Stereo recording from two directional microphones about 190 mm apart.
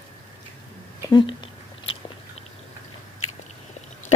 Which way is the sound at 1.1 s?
25° left (ahead or behind).